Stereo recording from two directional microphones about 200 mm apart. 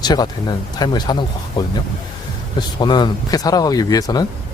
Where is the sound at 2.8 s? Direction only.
20° left (ahead or behind).